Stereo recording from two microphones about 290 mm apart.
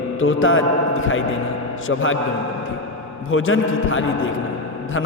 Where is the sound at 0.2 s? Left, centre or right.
Left.